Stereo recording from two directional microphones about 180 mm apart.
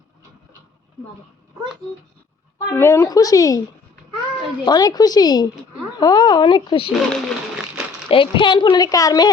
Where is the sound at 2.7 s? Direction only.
15° left (ahead or behind).